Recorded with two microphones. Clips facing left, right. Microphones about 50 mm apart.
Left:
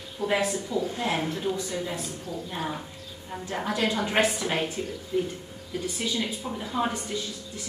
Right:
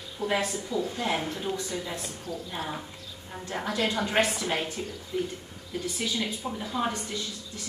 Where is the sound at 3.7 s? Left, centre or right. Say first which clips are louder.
Left 2 dB; left.